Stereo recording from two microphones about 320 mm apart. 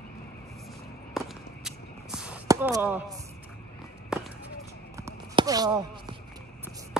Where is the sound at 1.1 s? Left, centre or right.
Centre.